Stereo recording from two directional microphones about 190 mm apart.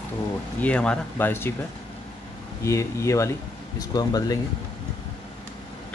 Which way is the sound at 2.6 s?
15° left (ahead or behind).